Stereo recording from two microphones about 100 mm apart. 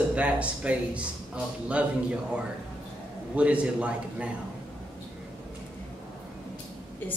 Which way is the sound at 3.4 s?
10° right (ahead or behind).